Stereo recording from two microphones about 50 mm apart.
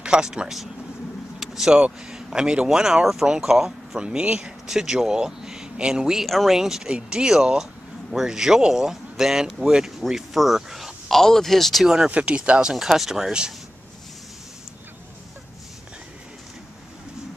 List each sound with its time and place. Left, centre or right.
0.0 s speech: centre
4.0 s speech: right
6.2 s speech: centre
11.1 s speech: centre
11.8 s speech: centre
12.1 s speech: right